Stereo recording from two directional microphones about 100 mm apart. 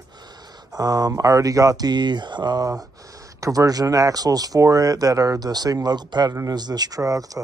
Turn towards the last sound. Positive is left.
turn(degrees=-35)  # may be behind; listen again after turning